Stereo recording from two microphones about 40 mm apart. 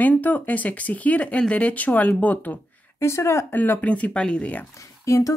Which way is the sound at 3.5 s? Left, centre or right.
Left.